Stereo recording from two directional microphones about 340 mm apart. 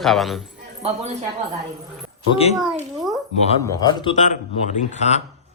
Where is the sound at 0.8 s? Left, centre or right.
Centre.